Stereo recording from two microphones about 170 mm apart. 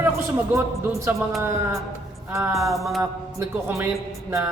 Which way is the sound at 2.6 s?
Centre (ahead or behind).